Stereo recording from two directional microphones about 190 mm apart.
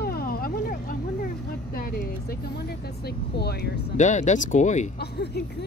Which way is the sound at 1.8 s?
50° left (ahead or behind).